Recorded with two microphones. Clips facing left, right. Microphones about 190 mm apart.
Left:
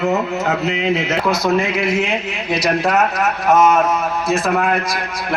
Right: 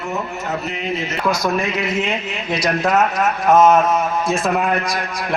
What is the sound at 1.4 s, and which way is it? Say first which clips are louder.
Speech: left 3 dB; 15° left (ahead or behind).